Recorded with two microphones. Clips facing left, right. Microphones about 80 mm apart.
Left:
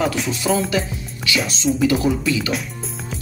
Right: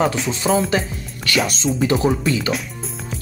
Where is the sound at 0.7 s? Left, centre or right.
Right.